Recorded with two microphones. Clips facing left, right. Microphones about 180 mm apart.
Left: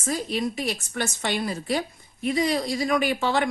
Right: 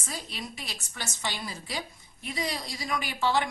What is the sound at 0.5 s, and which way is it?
A woman's voice, 60° left (ahead or behind).